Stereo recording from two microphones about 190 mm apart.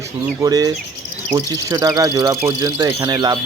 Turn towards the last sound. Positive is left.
turn(degrees=-20)  # may be behind; listen again after turning